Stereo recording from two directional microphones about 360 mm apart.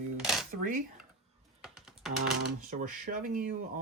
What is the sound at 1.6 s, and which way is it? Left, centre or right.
Computer keyboard, centre.